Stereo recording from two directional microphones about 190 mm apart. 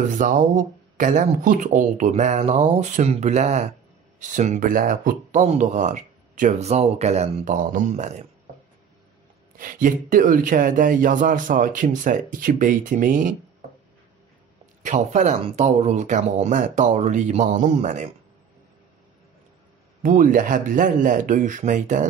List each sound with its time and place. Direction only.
0.2 s speech: 45° right (ahead or behind)
9.6 s speech: 45° right (ahead or behind)
14.8 s speech: 40° right (ahead or behind)
20.0 s speech: 45° right (ahead or behind)